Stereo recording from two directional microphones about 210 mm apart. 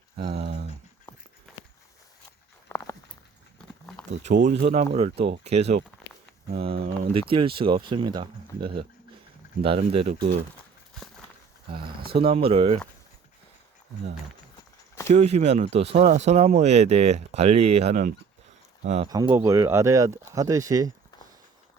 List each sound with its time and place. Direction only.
0.2 s a sound: 25° right (ahead or behind)
1.1 s horse: 10° left (ahead or behind)
2.6 s a sound: 10° left (ahead or behind)
4.4 s speech: 35° right (ahead or behind)
12.1 s speech: 25° right (ahead or behind)
15.1 s speech: 30° right (ahead or behind)
19.0 s speech: 20° right (ahead or behind)